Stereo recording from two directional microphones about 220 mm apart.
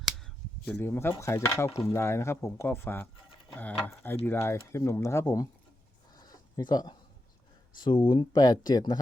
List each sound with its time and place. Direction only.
0.0 s speech: 5° left (ahead or behind)
6.1 s a sound: 20° left (ahead or behind)
7.8 s speech: 20° left (ahead or behind)